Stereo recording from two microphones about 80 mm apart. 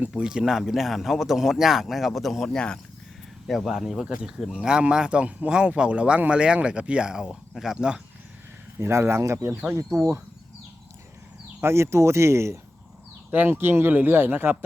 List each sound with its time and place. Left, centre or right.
0.1 s speech: centre
2.6 s speech: centre
8.8 s speech: right
11.6 s speech: right